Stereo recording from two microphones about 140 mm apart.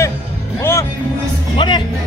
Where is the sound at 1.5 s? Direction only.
35° left (ahead or behind).